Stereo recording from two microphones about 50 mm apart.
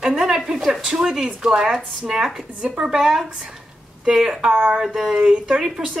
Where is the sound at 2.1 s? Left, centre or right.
Centre.